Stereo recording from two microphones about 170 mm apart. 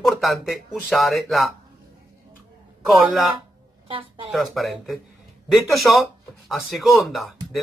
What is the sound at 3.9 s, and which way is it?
Speech, 30° right (ahead or behind).